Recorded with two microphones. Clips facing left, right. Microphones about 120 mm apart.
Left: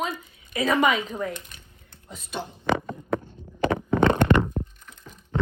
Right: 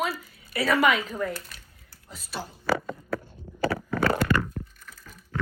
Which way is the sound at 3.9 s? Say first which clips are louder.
Left 6 dB; 20° left (ahead or behind).